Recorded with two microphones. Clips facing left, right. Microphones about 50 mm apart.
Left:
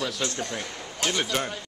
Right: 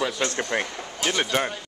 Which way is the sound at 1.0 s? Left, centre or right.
Right.